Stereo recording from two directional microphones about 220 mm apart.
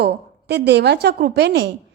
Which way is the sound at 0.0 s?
50° right (ahead or behind).